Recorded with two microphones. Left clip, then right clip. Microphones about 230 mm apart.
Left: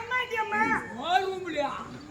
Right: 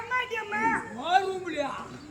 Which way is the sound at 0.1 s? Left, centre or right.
Centre.